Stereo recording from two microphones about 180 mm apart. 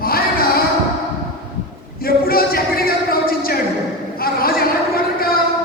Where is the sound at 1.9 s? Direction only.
55° left (ahead or behind).